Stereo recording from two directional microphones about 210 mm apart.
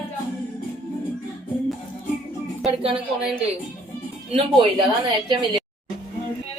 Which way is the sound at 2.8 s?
25° right (ahead or behind).